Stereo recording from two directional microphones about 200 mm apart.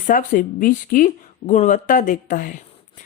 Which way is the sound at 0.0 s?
40° left (ahead or behind).